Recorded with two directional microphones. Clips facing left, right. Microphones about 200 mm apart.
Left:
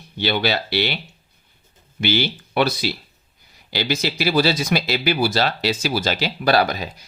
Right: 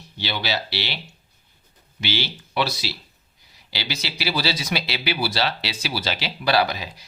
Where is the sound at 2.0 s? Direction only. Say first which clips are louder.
Left 7 dB; 55° left (ahead or behind).